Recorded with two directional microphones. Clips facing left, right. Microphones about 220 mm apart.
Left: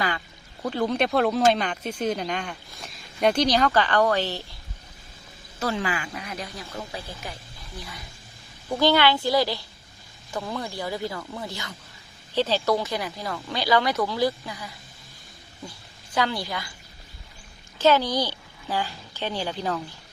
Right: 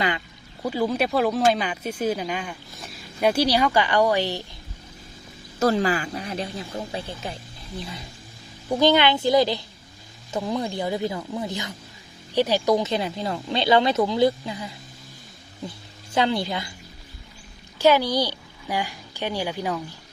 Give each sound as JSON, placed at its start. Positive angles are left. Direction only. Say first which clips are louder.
{"t": 0.6, "sound": "speech", "louder": "right 1 dB", "side_deg": -5}
{"t": 5.5, "sound": "speech", "louder": "right 7 dB", "side_deg": -40}
{"t": 16.1, "sound": "speech", "louder": "right 4 dB", "side_deg": -25}
{"t": 17.7, "sound": "a woman's voice", "louder": "right 2 dB", "side_deg": -10}